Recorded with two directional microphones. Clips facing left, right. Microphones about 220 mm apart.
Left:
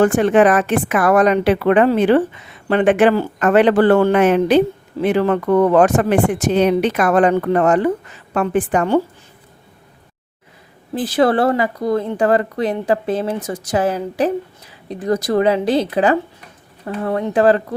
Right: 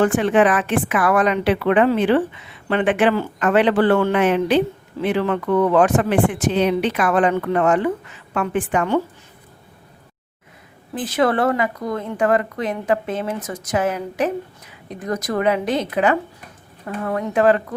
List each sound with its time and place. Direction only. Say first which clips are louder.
0.0 s a woman's voice: left 3 dB; 45° left (ahead or behind)
10.9 s a woman's voice: left 4 dB; 35° left (ahead or behind)